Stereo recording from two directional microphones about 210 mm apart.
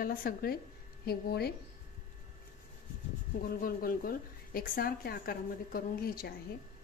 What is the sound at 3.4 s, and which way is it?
A woman's voice, 45° left (ahead or behind).